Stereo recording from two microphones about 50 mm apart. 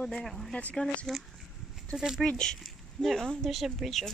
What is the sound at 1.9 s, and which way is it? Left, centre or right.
Speech, centre.